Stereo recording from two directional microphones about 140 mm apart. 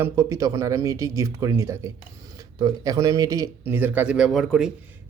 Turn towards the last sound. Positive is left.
turn(degrees=-5)  # may be behind; listen again after turning